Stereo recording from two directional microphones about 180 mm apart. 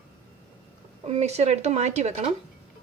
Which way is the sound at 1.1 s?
35° right (ahead or behind).